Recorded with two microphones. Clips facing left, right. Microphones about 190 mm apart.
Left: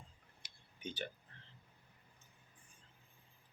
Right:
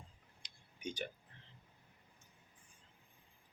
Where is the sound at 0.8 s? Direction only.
10° right (ahead or behind).